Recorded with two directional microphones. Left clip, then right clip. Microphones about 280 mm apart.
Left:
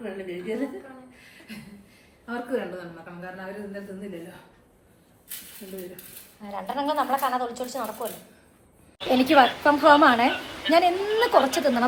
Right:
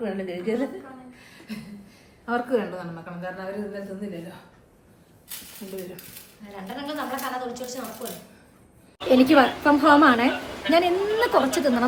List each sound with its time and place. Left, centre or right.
0.0 s a woman's voice: right
2.2 s a woman's voice: right
6.4 s a woman's voice: centre
9.0 s a woman's voice: centre